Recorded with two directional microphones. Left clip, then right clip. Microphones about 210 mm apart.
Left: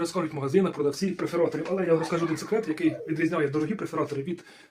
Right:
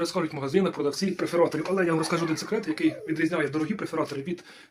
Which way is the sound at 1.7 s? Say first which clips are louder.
Even; 20° right (ahead or behind).